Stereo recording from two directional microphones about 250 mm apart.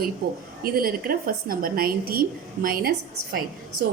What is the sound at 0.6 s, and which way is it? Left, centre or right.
A woman's voice, right.